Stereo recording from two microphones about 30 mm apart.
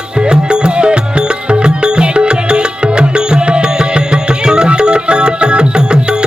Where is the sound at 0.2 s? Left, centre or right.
Right.